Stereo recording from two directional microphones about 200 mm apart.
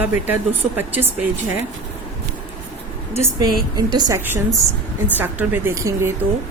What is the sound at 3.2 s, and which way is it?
A woman's voice, 20° right (ahead or behind).